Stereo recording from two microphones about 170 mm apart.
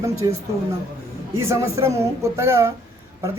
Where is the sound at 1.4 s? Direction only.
15° right (ahead or behind).